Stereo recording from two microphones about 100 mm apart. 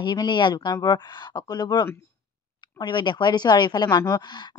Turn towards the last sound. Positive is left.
turn(degrees=45)  # may be behind; listen again after turning